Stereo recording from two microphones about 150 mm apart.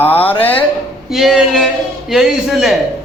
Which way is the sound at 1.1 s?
Centre (ahead or behind).